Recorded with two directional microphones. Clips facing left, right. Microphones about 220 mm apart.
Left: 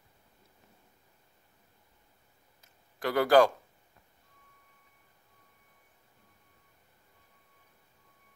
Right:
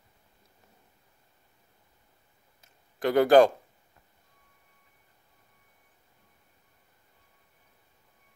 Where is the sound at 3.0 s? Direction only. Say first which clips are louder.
Right 4 dB; 20° right (ahead or behind).